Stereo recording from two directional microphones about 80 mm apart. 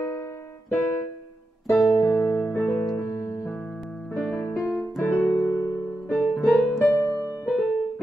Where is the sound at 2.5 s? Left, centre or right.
Left.